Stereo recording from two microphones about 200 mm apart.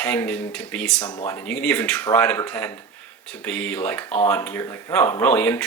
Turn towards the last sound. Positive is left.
turn(degrees=5)  # may be behind; listen again after turning